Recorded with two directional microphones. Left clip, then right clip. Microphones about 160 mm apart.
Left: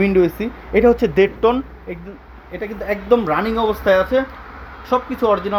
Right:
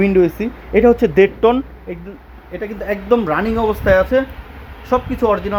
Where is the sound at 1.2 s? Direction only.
30° right (ahead or behind).